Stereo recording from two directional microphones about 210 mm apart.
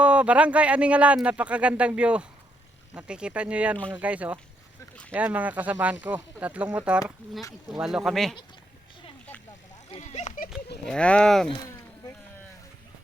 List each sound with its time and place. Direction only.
0.0 s speech: 5° right (ahead or behind)
9.9 s a sound: 30° left (ahead or behind)
10.8 s speech: 5° left (ahead or behind)